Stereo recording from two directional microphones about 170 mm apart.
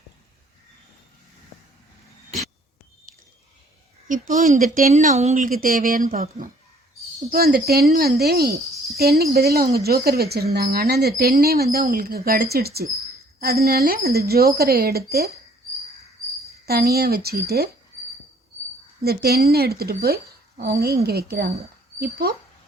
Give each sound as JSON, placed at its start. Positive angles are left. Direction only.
{"t": 4.1, "sound": "speech", "side_deg": -50}
{"t": 7.3, "sound": "a woman's voice", "side_deg": -60}
{"t": 16.6, "sound": "a woman's voice", "side_deg": -65}
{"t": 19.0, "sound": "a woman's voice", "side_deg": -65}